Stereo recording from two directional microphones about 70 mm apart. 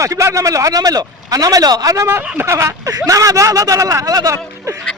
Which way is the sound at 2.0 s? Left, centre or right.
Right.